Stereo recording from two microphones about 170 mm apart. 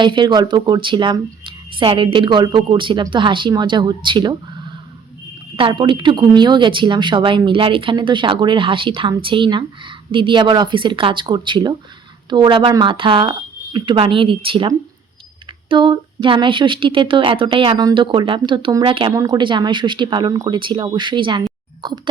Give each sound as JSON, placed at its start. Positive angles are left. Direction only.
{"t": 0.0, "sound": "speech", "side_deg": -25}
{"t": 5.5, "sound": "speech", "side_deg": -30}